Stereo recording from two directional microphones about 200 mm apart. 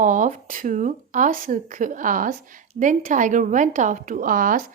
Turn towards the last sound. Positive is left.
turn(degrees=-45)  # may be behind; listen again after turning